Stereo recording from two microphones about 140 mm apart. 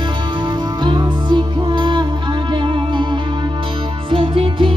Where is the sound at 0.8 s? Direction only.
35° right (ahead or behind).